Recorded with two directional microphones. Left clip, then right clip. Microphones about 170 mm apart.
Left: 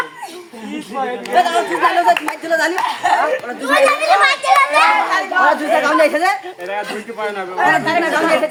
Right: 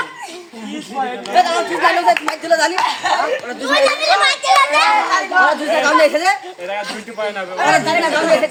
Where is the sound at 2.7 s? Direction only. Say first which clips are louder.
Left 1 dB; 5° left (ahead or behind); by 4.9 s 20° right (ahead or behind).